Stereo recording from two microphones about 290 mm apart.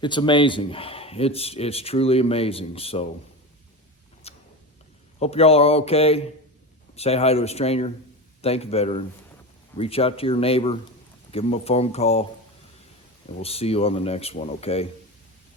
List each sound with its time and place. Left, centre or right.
0.0 s speech: centre
4.2 s a sound: left
5.2 s speech: left
13.4 s speech: left